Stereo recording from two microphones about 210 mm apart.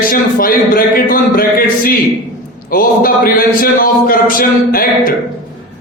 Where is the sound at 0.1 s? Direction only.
40° left (ahead or behind).